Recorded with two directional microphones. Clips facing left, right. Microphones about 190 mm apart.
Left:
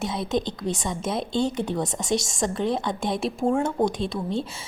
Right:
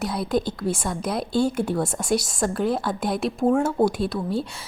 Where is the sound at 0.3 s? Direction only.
5° right (ahead or behind).